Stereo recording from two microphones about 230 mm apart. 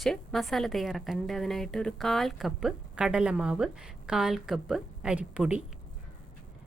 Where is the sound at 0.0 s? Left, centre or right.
Centre.